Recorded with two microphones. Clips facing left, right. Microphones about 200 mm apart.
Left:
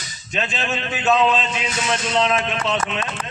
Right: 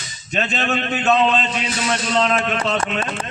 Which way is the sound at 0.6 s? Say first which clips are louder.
Right 4 dB; 60° right (ahead or behind).